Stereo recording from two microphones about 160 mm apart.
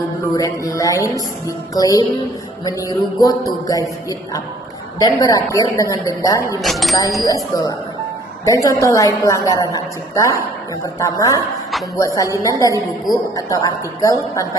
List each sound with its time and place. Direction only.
0.3 s a woman's voice: 20° left (ahead or behind)
4.9 s a woman's voice: 25° left (ahead or behind)
6.6 s speech: centre (ahead or behind)
7.3 s a woman's voice: 25° left (ahead or behind)